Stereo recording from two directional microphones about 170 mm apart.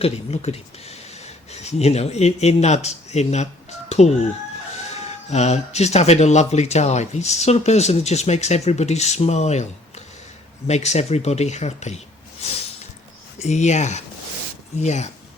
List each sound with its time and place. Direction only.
0.0 s speech: 35° left (ahead or behind)
13.4 s speech: 45° left (ahead or behind)